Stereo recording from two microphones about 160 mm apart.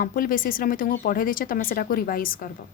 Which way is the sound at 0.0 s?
60° left (ahead or behind).